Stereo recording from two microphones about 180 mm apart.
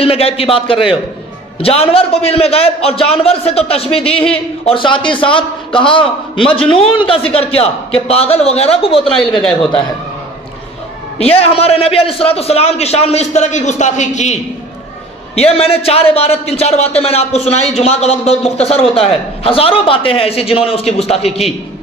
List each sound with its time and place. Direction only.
0.0 s a man's voice: 35° left (ahead or behind)
9.4 s a man's voice: 5° left (ahead or behind)
11.1 s a man's voice: 35° left (ahead or behind)